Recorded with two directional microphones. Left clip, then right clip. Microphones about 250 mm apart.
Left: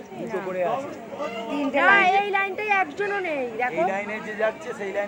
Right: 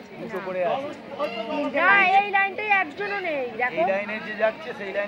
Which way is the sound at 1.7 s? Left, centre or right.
Left.